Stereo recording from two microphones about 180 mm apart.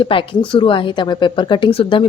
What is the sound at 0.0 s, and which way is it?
Speech, 30° left (ahead or behind).